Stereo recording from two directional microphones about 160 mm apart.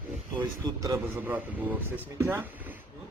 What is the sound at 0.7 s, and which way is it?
A man's voice, 20° right (ahead or behind).